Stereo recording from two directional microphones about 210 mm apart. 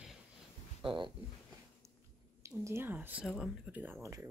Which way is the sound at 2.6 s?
10° right (ahead or behind).